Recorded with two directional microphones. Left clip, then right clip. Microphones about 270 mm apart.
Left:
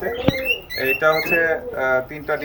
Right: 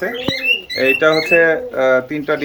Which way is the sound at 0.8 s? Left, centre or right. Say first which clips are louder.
Right 4 dB; right.